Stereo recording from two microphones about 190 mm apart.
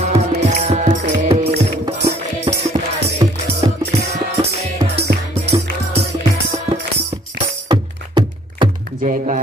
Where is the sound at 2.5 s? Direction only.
25° right (ahead or behind).